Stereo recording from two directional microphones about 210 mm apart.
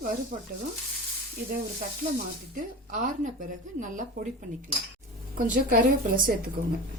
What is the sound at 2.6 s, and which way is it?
A woman's voice, 40° right (ahead or behind).